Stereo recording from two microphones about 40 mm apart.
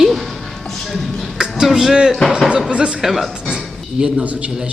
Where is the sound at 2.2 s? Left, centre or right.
Centre.